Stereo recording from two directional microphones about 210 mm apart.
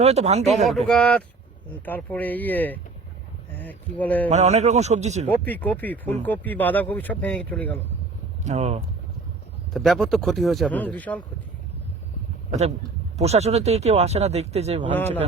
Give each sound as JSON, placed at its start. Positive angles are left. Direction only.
{"t": 0.0, "sound": "speech", "side_deg": -30}
{"t": 0.7, "sound": "a man's voice", "side_deg": 0}
{"t": 4.3, "sound": "speech", "side_deg": -30}
{"t": 5.5, "sound": "speech", "side_deg": 10}
{"t": 8.4, "sound": "speech", "side_deg": -30}
{"t": 9.7, "sound": "a man's voice", "side_deg": 0}
{"t": 12.5, "sound": "speech", "side_deg": -35}
{"t": 14.9, "sound": "speech", "side_deg": 10}